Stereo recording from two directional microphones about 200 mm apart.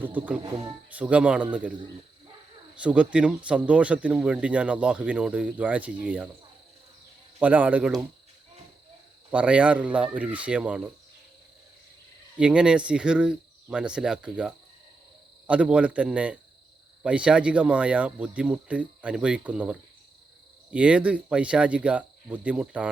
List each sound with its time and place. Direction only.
0.0 s speech: 10° right (ahead or behind)
0.4 s speech: 20° right (ahead or behind)
0.9 s speech: 5° right (ahead or behind)
2.7 s speech: 5° right (ahead or behind)
7.3 s speech: 10° right (ahead or behind)
9.3 s speech: 5° right (ahead or behind)
12.4 s speech: 5° right (ahead or behind)